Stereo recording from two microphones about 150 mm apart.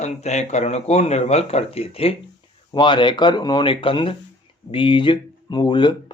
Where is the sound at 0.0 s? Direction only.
50° left (ahead or behind).